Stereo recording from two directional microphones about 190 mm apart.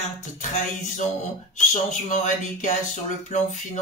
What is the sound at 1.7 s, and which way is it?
Speech, 40° left (ahead or behind).